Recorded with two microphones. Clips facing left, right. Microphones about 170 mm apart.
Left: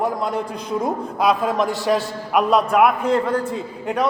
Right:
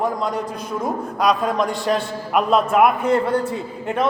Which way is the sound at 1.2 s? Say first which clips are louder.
Even; 10° left (ahead or behind).